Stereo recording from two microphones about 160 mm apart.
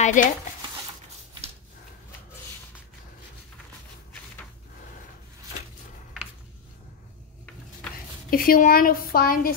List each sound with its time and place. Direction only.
0.0 s speech: 55° left (ahead or behind)
8.3 s a woman's voice: 65° left (ahead or behind)